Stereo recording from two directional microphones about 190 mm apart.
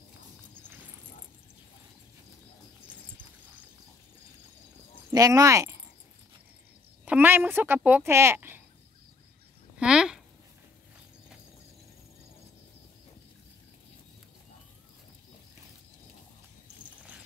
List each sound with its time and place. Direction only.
5.1 s speech: 20° right (ahead or behind)
7.1 s speech: 10° right (ahead or behind)
9.8 s a sound: 5° right (ahead or behind)